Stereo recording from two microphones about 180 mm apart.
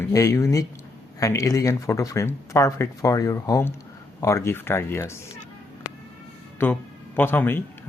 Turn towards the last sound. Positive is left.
turn(degrees=10)  # may be behind; listen again after turning